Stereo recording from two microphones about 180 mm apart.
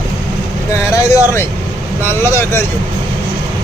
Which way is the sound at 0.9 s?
15° left (ahead or behind).